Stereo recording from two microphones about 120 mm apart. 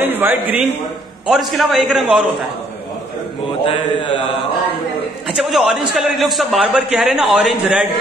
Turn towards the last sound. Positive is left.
turn(degrees=0)  # may be behind; listen again after turning